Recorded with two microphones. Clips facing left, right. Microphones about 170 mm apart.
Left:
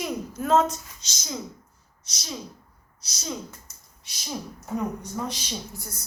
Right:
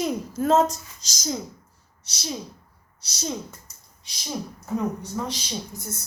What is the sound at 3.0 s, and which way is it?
Speech, 30° right (ahead or behind).